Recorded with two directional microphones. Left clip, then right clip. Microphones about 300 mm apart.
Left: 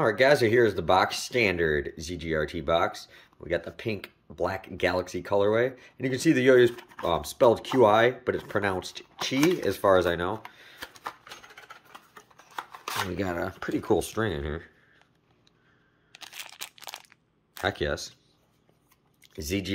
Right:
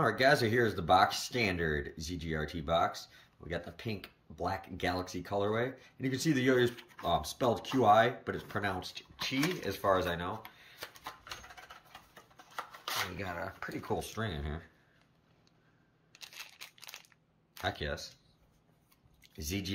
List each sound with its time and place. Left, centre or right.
0.0 s speech: centre
13.2 s speech: left; by 14.7 s centre
17.6 s speech: centre
19.2 s speech: centre